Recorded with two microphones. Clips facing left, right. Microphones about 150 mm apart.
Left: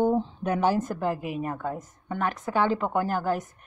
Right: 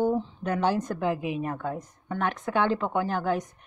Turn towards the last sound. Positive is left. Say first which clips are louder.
# even
turn(degrees=5)  # may be behind; listen again after turning